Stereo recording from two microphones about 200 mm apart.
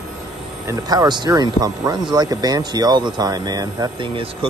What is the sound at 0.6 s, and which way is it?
Speech, 20° right (ahead or behind).